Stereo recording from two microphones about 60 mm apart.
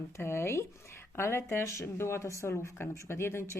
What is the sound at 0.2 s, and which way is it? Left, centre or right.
Speech, left.